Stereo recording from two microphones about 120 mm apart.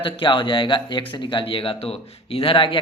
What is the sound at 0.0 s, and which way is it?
Speech, 45° left (ahead or behind).